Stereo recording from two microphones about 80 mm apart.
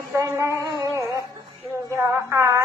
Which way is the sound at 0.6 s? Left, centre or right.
Right.